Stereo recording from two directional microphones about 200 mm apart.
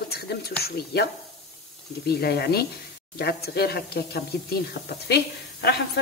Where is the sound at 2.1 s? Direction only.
55° left (ahead or behind).